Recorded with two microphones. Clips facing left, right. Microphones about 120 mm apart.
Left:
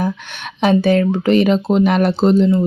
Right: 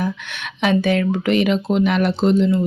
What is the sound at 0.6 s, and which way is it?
Speech, 35° left (ahead or behind).